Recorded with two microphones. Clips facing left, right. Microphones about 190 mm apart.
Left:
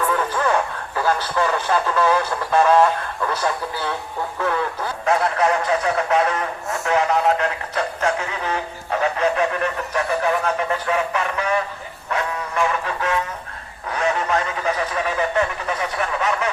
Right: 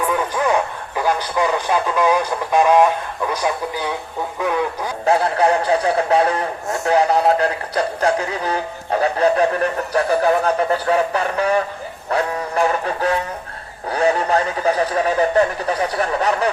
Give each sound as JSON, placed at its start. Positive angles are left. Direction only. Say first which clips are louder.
{"t": 0.0, "sound": "radio", "louder": "right 2 dB", "side_deg": -15}
{"t": 4.4, "sound": "a sound", "louder": "right 2 dB", "side_deg": -15}
{"t": 5.0, "sound": "speech", "louder": "right 3 dB", "side_deg": -30}
{"t": 12.1, "sound": "music", "louder": "right 4 dB", "side_deg": -35}
{"t": 13.9, "sound": "speech", "louder": "right 4 dB", "side_deg": -35}